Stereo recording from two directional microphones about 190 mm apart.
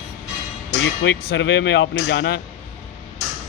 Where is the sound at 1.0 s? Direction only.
65° left (ahead or behind).